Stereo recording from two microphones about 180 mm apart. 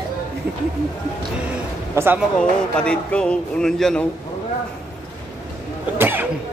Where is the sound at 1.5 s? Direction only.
10° right (ahead or behind).